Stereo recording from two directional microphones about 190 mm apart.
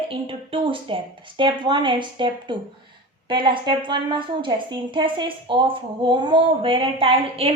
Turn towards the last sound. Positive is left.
turn(degrees=-30)  # may be behind; listen again after turning